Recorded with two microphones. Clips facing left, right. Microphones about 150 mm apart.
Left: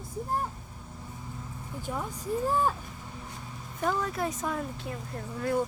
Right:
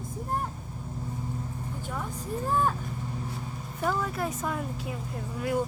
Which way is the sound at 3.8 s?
5° right (ahead or behind).